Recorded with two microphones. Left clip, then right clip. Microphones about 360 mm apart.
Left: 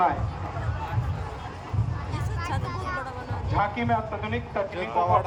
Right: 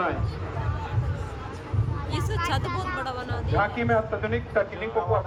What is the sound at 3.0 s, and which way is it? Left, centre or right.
Speech, centre.